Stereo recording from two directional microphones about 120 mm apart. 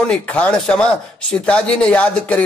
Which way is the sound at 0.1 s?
10° left (ahead or behind).